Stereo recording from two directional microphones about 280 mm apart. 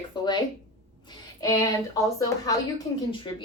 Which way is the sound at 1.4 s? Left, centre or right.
Centre.